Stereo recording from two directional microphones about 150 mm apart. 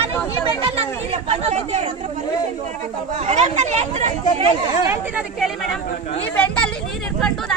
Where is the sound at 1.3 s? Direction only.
45° right (ahead or behind).